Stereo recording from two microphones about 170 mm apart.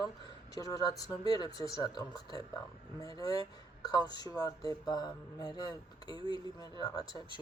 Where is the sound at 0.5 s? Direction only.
20° left (ahead or behind).